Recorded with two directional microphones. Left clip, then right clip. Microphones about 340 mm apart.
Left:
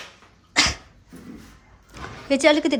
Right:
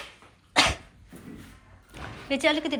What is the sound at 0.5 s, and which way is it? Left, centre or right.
Dog, centre.